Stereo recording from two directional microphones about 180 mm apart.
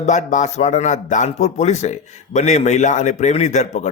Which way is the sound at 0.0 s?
40° left (ahead or behind).